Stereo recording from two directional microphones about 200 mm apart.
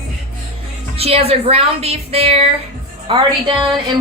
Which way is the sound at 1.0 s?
30° right (ahead or behind).